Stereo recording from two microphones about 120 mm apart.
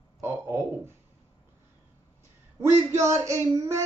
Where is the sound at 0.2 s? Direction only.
20° right (ahead or behind).